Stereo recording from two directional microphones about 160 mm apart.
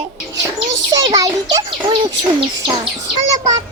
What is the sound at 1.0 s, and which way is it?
A child's voice, 25° right (ahead or behind).